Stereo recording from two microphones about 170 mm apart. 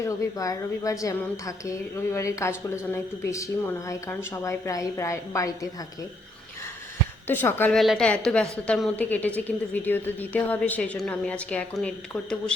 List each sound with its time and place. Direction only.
0.0 s a woman's voice: 20° left (ahead or behind)
7.3 s a woman's voice: 10° left (ahead or behind)